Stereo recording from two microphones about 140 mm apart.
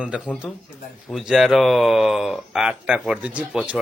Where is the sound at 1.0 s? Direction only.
Centre (ahead or behind).